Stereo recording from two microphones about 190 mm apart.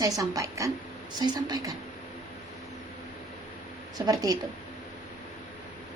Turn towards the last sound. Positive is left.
turn(degrees=-20)  # may be behind; listen again after turning